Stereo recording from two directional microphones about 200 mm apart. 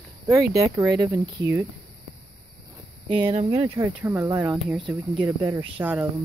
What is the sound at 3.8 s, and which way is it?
Speech, 10° right (ahead or behind).